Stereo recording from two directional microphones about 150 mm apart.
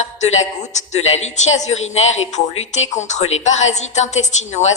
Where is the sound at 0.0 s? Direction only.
50° left (ahead or behind).